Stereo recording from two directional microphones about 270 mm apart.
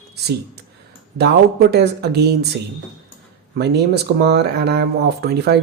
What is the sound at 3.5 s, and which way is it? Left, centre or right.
Speech, right.